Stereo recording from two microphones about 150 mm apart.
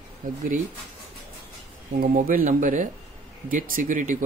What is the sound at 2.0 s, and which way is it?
Speech, 70° right (ahead or behind).